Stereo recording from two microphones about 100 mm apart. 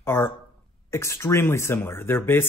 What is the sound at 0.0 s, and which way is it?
Speech, 25° left (ahead or behind).